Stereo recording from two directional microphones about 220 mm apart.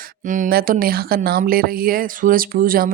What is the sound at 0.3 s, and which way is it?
Speech, 35° right (ahead or behind).